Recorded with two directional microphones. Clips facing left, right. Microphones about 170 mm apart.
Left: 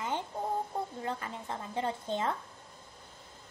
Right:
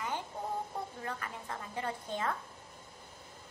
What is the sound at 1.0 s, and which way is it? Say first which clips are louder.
A woman's voice: left 4 dB; 25° left (ahead or behind).